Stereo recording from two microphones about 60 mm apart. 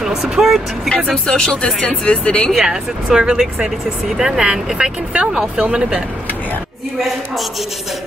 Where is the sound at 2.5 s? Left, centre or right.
Centre.